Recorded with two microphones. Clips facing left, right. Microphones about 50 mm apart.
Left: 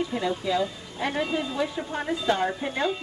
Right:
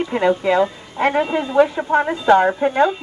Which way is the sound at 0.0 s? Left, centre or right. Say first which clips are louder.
Right 10 dB; right.